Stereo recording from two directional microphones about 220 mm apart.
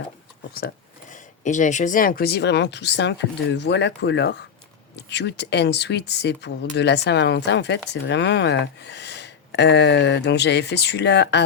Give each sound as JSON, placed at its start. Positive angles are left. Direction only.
{"t": 1.1, "sound": "speech", "side_deg": 35}